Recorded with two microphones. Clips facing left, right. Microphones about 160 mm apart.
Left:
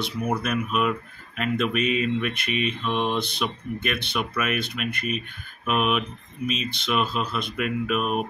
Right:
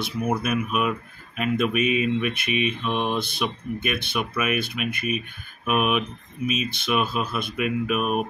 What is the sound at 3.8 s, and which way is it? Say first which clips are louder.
Speech: even; 5° right (ahead or behind).